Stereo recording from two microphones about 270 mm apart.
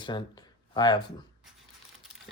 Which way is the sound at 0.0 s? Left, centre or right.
Centre.